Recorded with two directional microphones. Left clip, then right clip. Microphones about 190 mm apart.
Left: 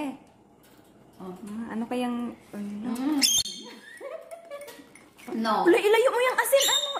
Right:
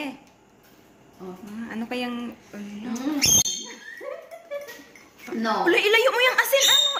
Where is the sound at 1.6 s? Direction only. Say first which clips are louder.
Even; 20° left (ahead or behind).